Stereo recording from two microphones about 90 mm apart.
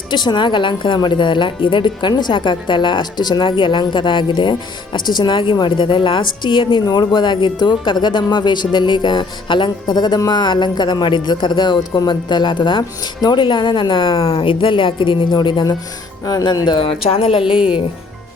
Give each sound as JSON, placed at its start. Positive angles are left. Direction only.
{"t": 0.1, "sound": "a woman's voice", "side_deg": 55}
{"t": 11.8, "sound": "a woman's voice", "side_deg": 55}
{"t": 16.8, "sound": "a woman's voice", "side_deg": 90}
{"t": 17.4, "sound": "a woman's voice", "side_deg": -10}